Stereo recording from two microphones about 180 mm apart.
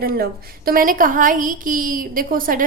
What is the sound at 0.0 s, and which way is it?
A woman's voice, 55° right (ahead or behind).